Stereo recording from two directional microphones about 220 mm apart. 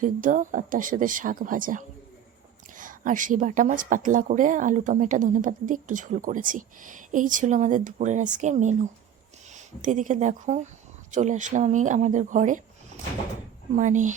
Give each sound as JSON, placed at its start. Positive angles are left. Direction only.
{"t": 0.0, "sound": "a woman's voice", "side_deg": -35}
{"t": 13.7, "sound": "a woman's voice", "side_deg": -35}